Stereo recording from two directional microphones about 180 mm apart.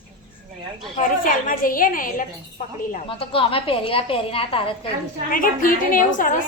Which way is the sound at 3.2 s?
30° left (ahead or behind).